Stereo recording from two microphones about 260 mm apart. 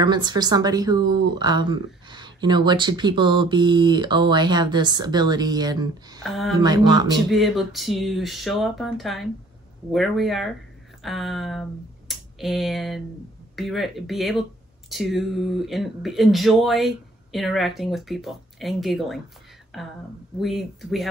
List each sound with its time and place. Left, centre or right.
0.0 s speech: centre
6.2 s speech: centre
6.6 s speech: centre
7.2 s speech: centre